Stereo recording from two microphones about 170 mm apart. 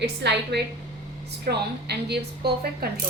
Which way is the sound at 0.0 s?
85° right.